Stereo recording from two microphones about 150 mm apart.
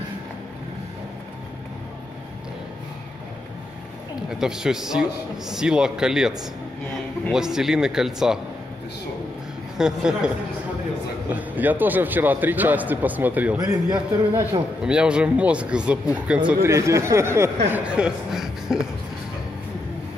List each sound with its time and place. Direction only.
4.3 s speech: 5° right (ahead or behind)
9.8 s speech: 5° right (ahead or behind)
11.3 s a man's voice: 10° right (ahead or behind)
13.6 s a man's voice: 25° right (ahead or behind)
14.8 s a man's voice: 5° right (ahead or behind)
16.6 s a man's voice: 20° right (ahead or behind)
17.7 s speech: 5° right (ahead or behind)